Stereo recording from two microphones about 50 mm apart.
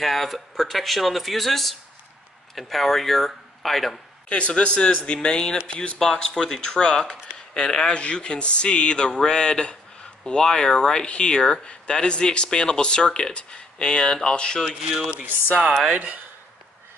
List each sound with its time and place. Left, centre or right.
0.0 s speech: centre
4.3 s speech: left
14.9 s speech: right
15.8 s speech: right